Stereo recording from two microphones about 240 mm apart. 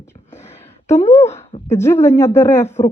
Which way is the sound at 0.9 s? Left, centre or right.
Left.